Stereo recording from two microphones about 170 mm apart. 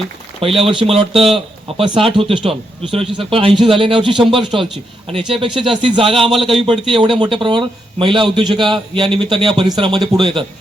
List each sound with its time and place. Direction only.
0.4 s a man's voice: 35° right (ahead or behind)